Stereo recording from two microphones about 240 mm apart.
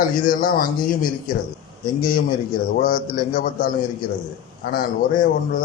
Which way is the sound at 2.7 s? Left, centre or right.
Left.